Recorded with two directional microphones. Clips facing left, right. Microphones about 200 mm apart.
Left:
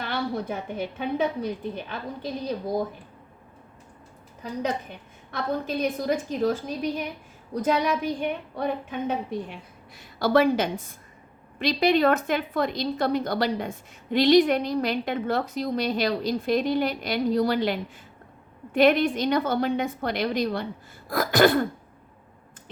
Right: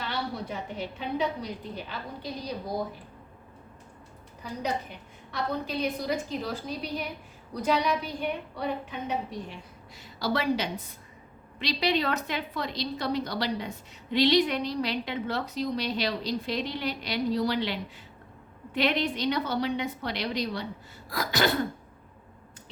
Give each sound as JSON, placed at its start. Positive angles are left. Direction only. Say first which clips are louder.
{"t": 0.0, "sound": "a woman's voice", "louder": "left 5 dB", "side_deg": 50}
{"t": 5.3, "sound": "a woman's voice", "louder": "left 3 dB", "side_deg": 50}